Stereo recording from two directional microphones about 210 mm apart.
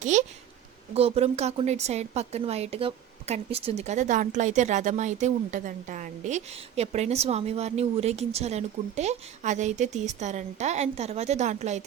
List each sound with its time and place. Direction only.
0.0 s speech: 35° right (ahead or behind)